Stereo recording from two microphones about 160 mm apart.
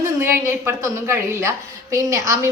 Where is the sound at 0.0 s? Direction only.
15° right (ahead or behind).